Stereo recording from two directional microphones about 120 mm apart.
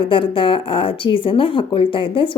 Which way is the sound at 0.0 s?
45° left (ahead or behind).